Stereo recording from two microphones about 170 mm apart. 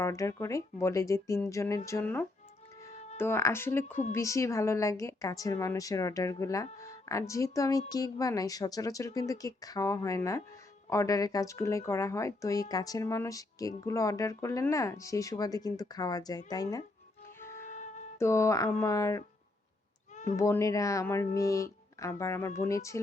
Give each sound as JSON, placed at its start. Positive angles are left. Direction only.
{"t": 0.0, "sound": "a woman's voice", "side_deg": 20}
{"t": 17.4, "sound": "music", "side_deg": 15}
{"t": 18.2, "sound": "speech", "side_deg": 15}
{"t": 20.2, "sound": "speech", "side_deg": 15}